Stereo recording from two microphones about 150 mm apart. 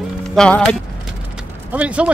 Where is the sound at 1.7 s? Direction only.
10° right (ahead or behind).